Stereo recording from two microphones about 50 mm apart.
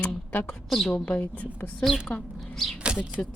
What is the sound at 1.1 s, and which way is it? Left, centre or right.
Speech, left.